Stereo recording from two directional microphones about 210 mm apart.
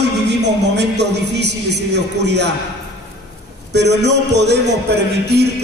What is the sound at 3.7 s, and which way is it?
Speech, 55° right (ahead or behind).